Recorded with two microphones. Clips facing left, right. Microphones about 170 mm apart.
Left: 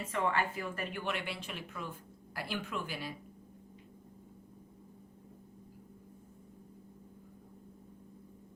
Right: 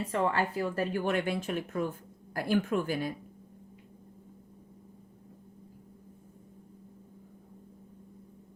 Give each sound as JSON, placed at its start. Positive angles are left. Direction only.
{"t": 0.0, "sound": "speech", "side_deg": -35}